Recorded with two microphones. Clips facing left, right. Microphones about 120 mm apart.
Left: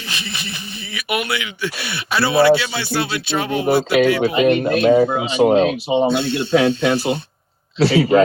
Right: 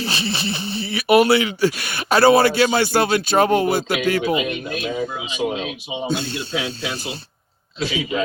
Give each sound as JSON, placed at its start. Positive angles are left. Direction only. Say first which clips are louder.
{"t": 0.0, "sound": "speech", "louder": "right 6 dB", "side_deg": -30}
{"t": 4.4, "sound": "speech", "louder": "left 9 dB", "side_deg": 60}
{"t": 6.1, "sound": "speech", "louder": "left 7 dB", "side_deg": -40}
{"t": 6.5, "sound": "speech", "louder": "left 14 dB", "side_deg": 45}
{"t": 7.8, "sound": "a man's voice", "louder": "left 10 dB", "side_deg": 70}